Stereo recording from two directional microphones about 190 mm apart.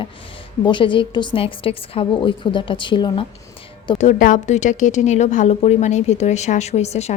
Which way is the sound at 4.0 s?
40° left (ahead or behind).